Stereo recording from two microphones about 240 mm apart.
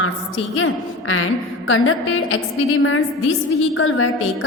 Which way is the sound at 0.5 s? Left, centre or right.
Left.